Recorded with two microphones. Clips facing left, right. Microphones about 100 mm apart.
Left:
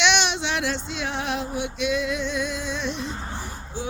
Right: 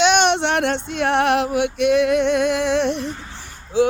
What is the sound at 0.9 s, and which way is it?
Music, 60° right (ahead or behind).